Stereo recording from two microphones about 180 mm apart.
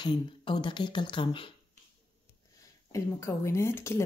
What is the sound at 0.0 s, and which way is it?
Speech, 25° left (ahead or behind).